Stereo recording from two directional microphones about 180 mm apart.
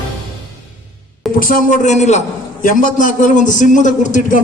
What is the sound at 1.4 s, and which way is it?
A man's voice, 50° left (ahead or behind).